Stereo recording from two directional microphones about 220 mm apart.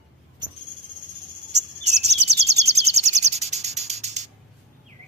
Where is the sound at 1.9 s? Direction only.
30° right (ahead or behind).